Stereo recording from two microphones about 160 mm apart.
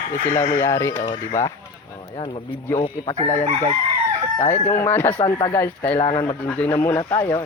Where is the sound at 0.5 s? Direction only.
15° left (ahead or behind).